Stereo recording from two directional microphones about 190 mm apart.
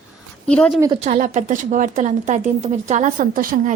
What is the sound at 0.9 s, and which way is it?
A woman's voice, 40° right (ahead or behind).